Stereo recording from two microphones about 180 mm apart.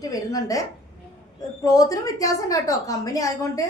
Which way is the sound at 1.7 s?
20° left (ahead or behind).